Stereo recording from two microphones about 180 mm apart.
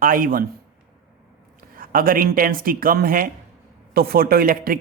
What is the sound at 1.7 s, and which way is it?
Speech, 50° right (ahead or behind).